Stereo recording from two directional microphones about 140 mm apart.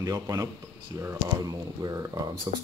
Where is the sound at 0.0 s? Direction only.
25° right (ahead or behind).